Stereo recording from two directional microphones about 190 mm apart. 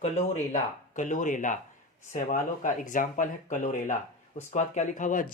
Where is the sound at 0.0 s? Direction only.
40° left (ahead or behind).